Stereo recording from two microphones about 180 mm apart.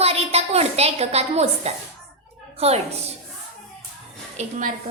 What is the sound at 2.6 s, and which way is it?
Speech, 35° right (ahead or behind).